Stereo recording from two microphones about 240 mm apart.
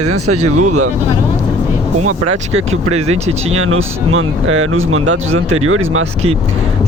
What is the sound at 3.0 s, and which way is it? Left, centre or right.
Speech, right.